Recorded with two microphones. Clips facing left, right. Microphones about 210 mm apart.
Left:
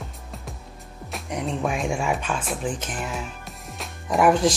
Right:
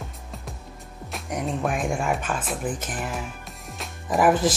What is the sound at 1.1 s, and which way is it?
Speech, centre (ahead or behind).